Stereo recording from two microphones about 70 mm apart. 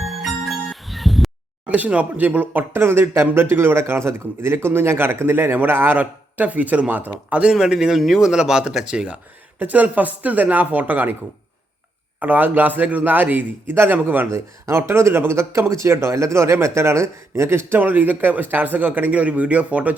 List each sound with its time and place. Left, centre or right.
0.0 s music: centre
1.7 s a man's voice: right
7.5 s speech: centre; by 11.1 s right
12.2 s a man's voice: right
14.3 s a man's voice: right
17.7 s a man's voice: right